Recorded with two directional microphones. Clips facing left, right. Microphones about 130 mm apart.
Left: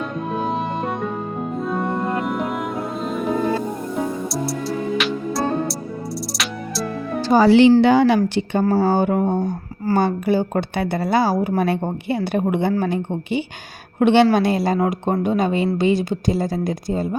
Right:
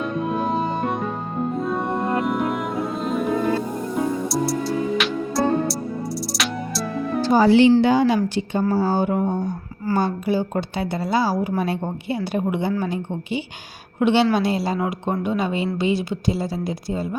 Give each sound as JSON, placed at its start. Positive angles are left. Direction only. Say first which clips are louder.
{"t": 0.3, "sound": "music", "louder": "left 1 dB", "side_deg": 0}
{"t": 1.6, "sound": "music", "louder": "left 1 dB", "side_deg": 0}
{"t": 4.9, "sound": "music", "louder": "even", "side_deg": 0}
{"t": 7.2, "sound": "speech", "louder": "left 2 dB", "side_deg": 85}
{"t": 7.8, "sound": "a woman's voice", "louder": "left 3 dB", "side_deg": 70}